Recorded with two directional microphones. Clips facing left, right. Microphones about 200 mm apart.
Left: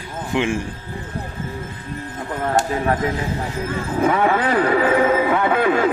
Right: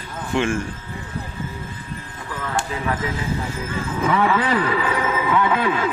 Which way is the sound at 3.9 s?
40° left (ahead or behind).